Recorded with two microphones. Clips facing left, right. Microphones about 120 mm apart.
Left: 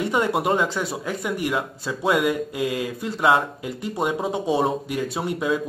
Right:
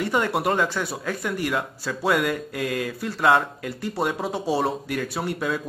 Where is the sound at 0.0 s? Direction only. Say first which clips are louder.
Left 1 dB; 20° left (ahead or behind).